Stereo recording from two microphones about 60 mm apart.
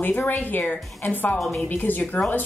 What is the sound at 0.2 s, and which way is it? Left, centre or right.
Speech, left.